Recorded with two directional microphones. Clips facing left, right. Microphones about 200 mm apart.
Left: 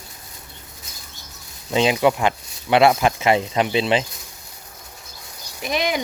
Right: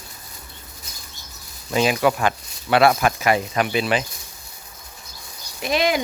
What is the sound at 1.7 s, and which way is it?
Speech, 20° left (ahead or behind).